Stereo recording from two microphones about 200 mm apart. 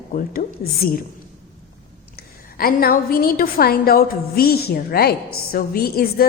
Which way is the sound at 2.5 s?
45° left (ahead or behind).